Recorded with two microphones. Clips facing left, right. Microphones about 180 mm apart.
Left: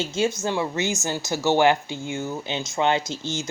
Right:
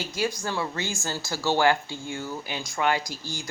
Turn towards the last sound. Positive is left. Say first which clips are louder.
# left 6 dB
turn(degrees=25)  # may be behind; listen again after turning